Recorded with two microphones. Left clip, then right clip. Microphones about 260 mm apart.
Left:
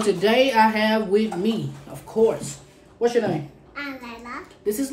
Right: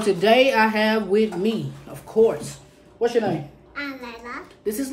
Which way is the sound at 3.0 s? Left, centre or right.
Centre.